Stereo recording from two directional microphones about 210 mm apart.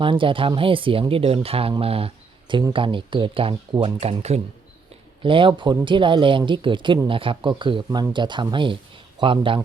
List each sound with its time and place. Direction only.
0.0 s speech: 25° right (ahead or behind)